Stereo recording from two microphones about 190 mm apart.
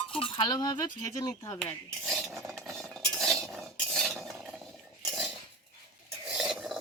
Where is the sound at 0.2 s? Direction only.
25° left (ahead or behind).